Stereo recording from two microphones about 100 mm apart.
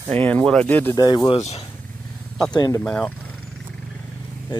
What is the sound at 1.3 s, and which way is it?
Speech, 80° left.